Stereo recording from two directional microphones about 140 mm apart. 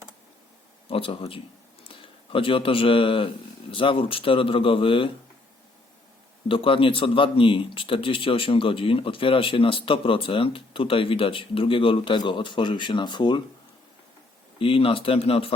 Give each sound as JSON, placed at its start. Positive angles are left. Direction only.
{"t": 0.9, "sound": "speech", "side_deg": 40}
{"t": 6.5, "sound": "speech", "side_deg": 40}
{"t": 14.6, "sound": "speech", "side_deg": 40}